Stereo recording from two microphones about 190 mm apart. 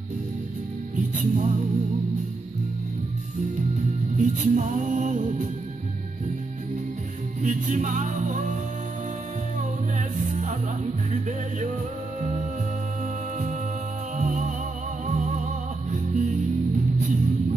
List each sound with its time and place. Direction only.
0.9 s music: 40° right (ahead or behind)
4.2 s music: 40° right (ahead or behind)
7.4 s music: 40° right (ahead or behind)
11.1 s music: 40° right (ahead or behind)
14.1 s music: 40° right (ahead or behind)